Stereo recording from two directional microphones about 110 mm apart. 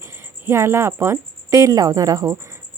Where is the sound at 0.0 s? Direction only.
25° right (ahead or behind).